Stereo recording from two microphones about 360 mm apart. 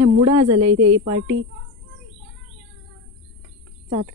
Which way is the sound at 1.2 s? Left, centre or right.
Right.